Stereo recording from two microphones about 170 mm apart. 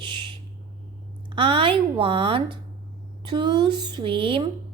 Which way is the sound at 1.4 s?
30° right (ahead or behind).